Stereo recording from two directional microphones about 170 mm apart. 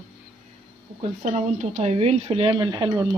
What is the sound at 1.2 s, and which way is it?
A woman's voice, 45° right (ahead or behind).